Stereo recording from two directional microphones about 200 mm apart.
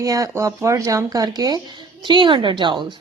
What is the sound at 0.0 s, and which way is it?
A woman's voice, 15° right (ahead or behind).